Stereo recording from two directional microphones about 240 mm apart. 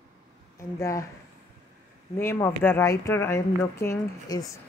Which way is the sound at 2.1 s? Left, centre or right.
Centre.